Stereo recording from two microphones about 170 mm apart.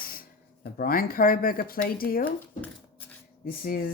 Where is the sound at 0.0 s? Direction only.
60° left (ahead or behind).